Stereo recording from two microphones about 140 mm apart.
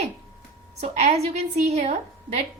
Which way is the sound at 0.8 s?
50° right (ahead or behind).